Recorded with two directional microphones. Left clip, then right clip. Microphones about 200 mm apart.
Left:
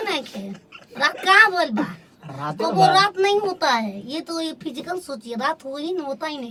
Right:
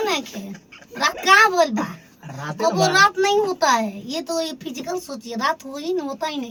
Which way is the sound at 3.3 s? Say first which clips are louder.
Right 2 dB; 15° left (ahead or behind).